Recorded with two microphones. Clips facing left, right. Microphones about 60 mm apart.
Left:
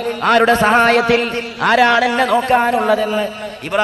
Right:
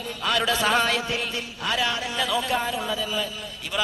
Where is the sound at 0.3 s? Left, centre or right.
Left.